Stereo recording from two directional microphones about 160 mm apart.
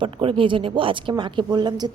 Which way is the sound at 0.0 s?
35° right (ahead or behind).